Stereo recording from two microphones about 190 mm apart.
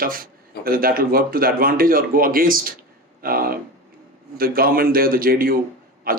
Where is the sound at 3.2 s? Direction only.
50° right (ahead or behind).